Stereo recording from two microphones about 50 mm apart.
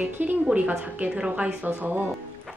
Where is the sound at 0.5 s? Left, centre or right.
Right.